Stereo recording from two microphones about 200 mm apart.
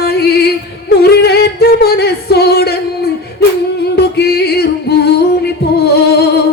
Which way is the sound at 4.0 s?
55° left (ahead or behind).